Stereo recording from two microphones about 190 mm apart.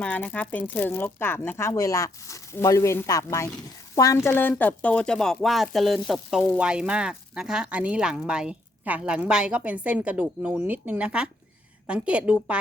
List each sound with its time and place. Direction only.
0.0 s a woman's voice: 10° left (ahead or behind)